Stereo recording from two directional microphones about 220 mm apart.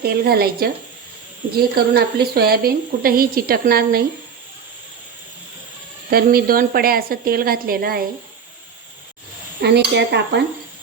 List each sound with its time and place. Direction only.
0.0 s a woman's voice: 45° right (ahead or behind)
6.1 s a woman's voice: 45° right (ahead or behind)
9.6 s a woman's voice: 50° right (ahead or behind)